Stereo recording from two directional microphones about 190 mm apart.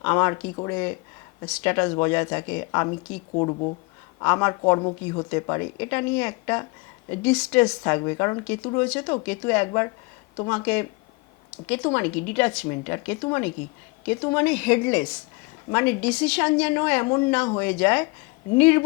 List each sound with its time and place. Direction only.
0.0 s speech: 15° left (ahead or behind)
3.3 s speech: 30° left (ahead or behind)
4.2 s speech: 15° left (ahead or behind)
4.6 s a woman's voice: 25° left (ahead or behind)
14.3 s speech: 10° left (ahead or behind)
17.4 s a woman's voice: 20° left (ahead or behind)
17.7 s speech: 10° left (ahead or behind)